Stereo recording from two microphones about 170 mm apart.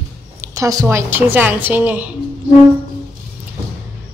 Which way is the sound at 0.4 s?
20° right (ahead or behind).